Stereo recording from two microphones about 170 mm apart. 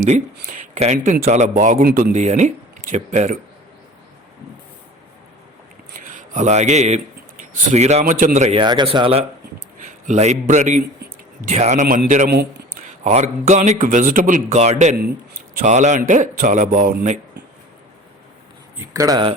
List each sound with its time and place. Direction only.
0.6 s a man's voice: 45° right (ahead or behind)
2.1 s a man's voice: 45° right (ahead or behind)
6.0 s speech: 45° right (ahead or behind)
8.5 s a man's voice: 25° right (ahead or behind); by 12.6 s 65° right (ahead or behind)
13.1 s a man's voice: 45° right (ahead or behind)
18.8 s speech: 20° right (ahead or behind)